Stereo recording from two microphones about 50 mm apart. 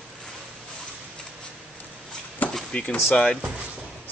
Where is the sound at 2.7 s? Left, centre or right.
Left.